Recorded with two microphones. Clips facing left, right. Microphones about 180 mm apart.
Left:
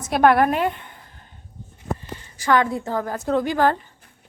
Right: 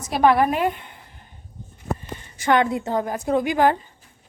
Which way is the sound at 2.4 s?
20° right (ahead or behind).